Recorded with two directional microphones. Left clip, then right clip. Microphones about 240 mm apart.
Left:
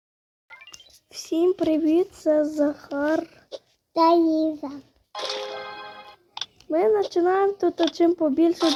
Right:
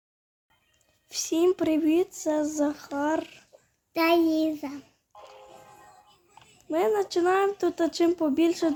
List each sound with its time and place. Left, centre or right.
1.1 s speech: centre
3.9 s child singing: right
4.4 s a child's voice: centre
5.1 s music: left
6.7 s speech: centre